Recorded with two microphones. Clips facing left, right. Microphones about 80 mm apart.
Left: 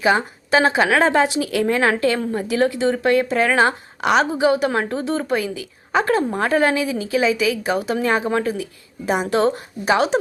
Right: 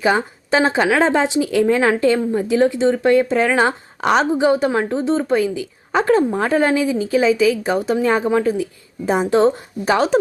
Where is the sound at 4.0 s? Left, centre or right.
Centre.